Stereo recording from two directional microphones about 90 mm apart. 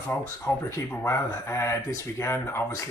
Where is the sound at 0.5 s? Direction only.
35° left (ahead or behind).